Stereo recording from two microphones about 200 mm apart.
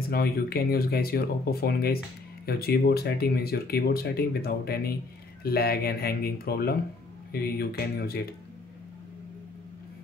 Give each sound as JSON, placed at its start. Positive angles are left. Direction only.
{"t": 0.1, "sound": "speech", "side_deg": 50}